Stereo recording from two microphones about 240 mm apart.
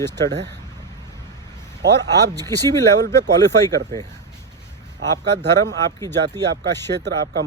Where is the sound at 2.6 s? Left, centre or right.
Centre.